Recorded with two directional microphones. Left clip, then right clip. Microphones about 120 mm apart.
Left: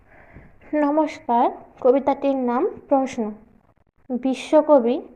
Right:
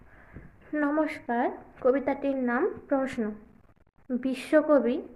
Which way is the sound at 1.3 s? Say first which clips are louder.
Left 9 dB; 20° right (ahead or behind).